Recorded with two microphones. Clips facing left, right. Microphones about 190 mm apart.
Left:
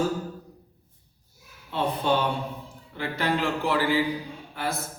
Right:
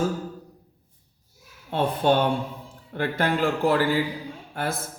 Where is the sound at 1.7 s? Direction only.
50° right (ahead or behind).